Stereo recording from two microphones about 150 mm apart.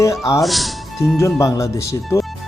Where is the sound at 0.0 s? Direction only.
20° left (ahead or behind).